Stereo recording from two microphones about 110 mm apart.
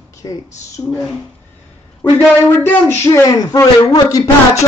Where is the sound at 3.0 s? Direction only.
30° left (ahead or behind).